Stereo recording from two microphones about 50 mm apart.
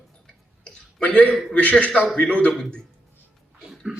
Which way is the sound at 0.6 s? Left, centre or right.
Left.